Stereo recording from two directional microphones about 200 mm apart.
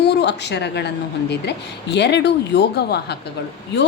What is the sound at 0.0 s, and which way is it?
A woman's voice, 55° left (ahead or behind).